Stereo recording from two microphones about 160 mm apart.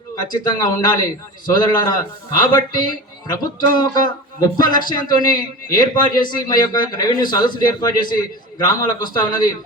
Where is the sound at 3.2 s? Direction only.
25° left (ahead or behind).